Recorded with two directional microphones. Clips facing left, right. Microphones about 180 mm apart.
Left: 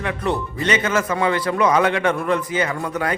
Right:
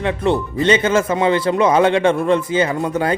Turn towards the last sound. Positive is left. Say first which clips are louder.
# right 5 dB
turn(degrees=-30)  # may be behind; listen again after turning